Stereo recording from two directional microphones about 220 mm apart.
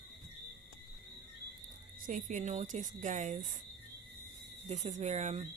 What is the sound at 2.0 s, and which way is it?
Speech, 35° right (ahead or behind).